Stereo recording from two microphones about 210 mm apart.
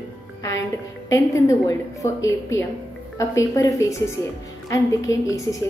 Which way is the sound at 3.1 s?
15° left (ahead or behind).